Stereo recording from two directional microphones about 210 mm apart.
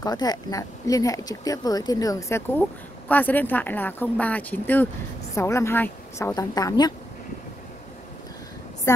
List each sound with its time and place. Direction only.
0.0 s speech: 20° left (ahead or behind)